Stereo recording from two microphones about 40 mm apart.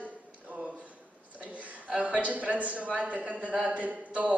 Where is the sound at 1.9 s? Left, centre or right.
Right.